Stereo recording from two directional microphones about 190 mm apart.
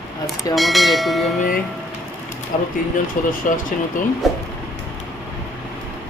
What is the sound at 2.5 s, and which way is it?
Speech, 40° left (ahead or behind).